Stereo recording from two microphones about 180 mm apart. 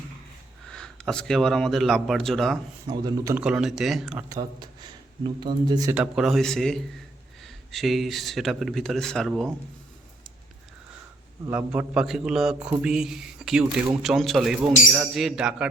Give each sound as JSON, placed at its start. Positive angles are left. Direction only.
{"t": 0.7, "sound": "speech", "side_deg": 5}
{"t": 2.8, "sound": "speech", "side_deg": -20}
{"t": 3.3, "sound": "speech", "side_deg": -5}
{"t": 4.3, "sound": "speech", "side_deg": -25}
{"t": 5.9, "sound": "speech", "side_deg": -5}
{"t": 11.5, "sound": "speech", "side_deg": -5}